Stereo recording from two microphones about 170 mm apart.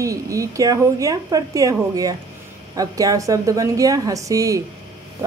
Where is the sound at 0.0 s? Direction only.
20° right (ahead or behind).